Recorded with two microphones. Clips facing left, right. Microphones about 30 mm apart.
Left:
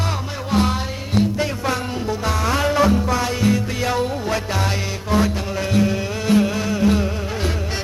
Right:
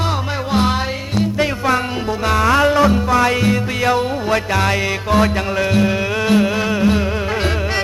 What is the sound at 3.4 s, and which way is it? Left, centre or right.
Music, right.